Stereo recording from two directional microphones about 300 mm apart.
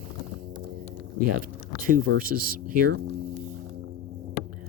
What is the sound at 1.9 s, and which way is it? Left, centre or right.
Speech, right.